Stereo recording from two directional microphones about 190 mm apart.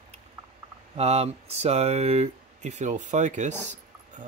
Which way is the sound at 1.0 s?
35° right (ahead or behind).